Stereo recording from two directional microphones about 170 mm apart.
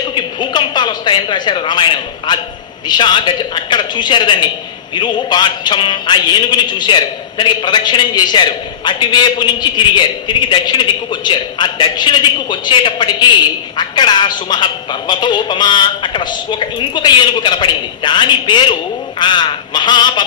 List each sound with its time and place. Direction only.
0.1 s a man's voice: 25° left (ahead or behind)